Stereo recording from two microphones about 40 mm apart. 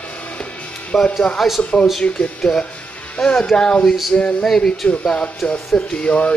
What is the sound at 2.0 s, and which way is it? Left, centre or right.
Speech, left.